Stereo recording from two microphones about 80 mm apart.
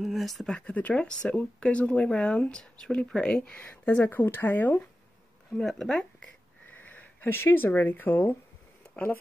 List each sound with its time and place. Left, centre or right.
0.0 s speech: centre; by 4.8 s left
5.6 s speech: centre
6.7 s speech: left